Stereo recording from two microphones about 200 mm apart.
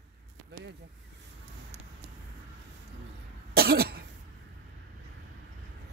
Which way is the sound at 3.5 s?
50° right (ahead or behind).